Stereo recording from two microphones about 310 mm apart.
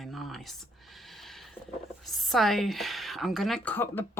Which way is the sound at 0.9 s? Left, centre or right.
Centre.